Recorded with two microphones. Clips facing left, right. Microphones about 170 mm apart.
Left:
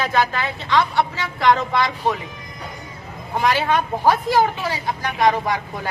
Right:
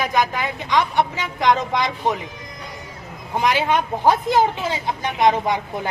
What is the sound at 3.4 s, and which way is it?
Speech, 20° right (ahead or behind).